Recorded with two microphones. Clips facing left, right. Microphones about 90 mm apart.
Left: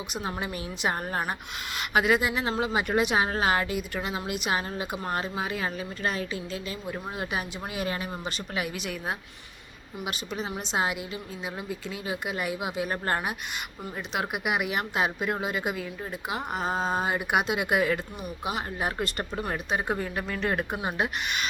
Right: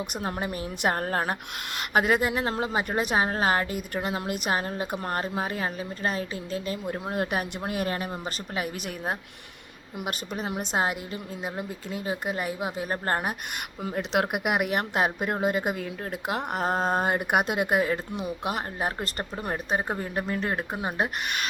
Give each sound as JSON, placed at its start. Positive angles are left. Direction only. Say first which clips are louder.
{"t": 0.1, "sound": "a woman's voice", "louder": "right 2 dB", "side_deg": -50}
{"t": 1.9, "sound": "a woman's voice", "louder": "right 1 dB", "side_deg": -45}
{"t": 13.9, "sound": "a woman's voice", "louder": "right 5 dB", "side_deg": -65}
{"t": 16.3, "sound": "a woman's voice", "louder": "right 3 dB", "side_deg": -60}
{"t": 20.0, "sound": "speech", "louder": "right 1 dB", "side_deg": -35}